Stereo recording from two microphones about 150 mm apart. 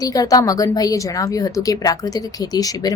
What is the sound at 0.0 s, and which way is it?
A woman's voice, 25° left (ahead or behind).